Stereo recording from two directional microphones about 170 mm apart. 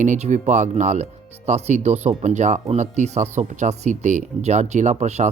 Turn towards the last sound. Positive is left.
turn(degrees=-40)  # may be behind; listen again after turning